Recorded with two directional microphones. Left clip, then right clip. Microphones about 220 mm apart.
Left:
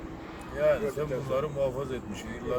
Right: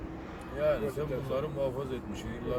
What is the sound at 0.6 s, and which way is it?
Speech, 5° left (ahead or behind).